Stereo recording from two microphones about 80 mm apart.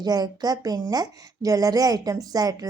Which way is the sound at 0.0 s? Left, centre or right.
Right.